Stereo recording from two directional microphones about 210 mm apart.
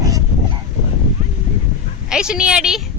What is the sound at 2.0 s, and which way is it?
Speech, 5° right (ahead or behind).